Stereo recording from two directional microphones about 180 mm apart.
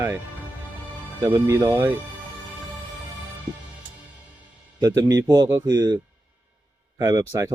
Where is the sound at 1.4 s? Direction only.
15° right (ahead or behind).